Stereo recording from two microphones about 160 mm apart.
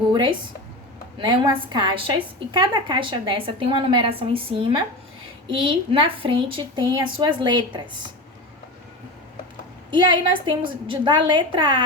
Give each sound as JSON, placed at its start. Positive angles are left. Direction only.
{"t": 0.1, "sound": "a woman's voice", "side_deg": -30}
{"t": 9.9, "sound": "a woman's voice", "side_deg": -30}